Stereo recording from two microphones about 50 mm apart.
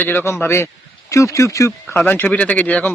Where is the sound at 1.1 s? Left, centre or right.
Left.